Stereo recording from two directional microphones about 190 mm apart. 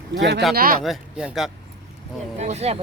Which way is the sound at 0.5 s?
50° right (ahead or behind).